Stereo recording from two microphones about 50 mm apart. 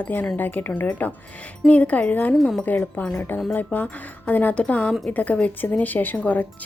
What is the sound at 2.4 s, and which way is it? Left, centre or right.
Speech, centre.